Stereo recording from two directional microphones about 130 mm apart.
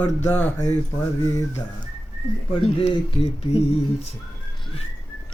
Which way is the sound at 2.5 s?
45° left (ahead or behind).